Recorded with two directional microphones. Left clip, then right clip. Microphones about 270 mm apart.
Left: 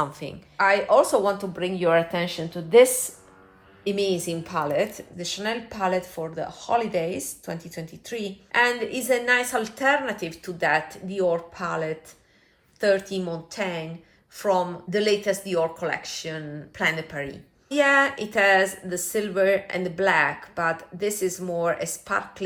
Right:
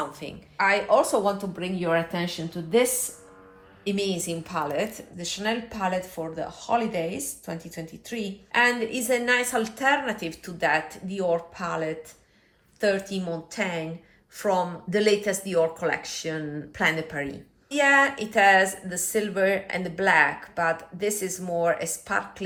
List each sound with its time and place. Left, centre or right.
0.0 s a woman's voice: left
3.8 s a woman's voice: centre
17.7 s a woman's voice: centre